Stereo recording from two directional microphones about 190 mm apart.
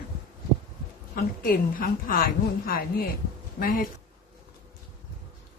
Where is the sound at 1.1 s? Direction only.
50° left (ahead or behind).